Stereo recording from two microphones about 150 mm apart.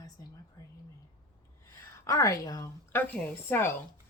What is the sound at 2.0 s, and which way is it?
Speech, 20° left (ahead or behind).